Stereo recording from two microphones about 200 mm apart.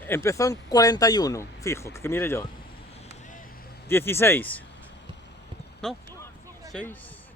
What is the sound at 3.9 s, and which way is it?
Speech, 10° left (ahead or behind).